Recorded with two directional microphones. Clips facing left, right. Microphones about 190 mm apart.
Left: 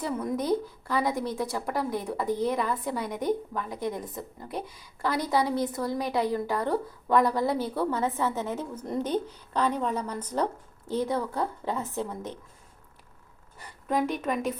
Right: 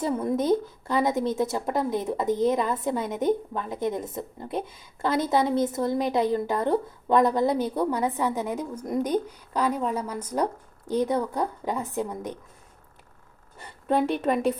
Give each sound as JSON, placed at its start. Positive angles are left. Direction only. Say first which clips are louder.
{"t": 0.0, "sound": "a woman's voice", "louder": "right 4 dB", "side_deg": -25}
{"t": 13.6, "sound": "a woman's voice", "louder": "right 3 dB", "side_deg": -25}